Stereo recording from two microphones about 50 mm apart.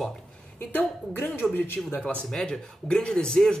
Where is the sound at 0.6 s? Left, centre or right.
Left.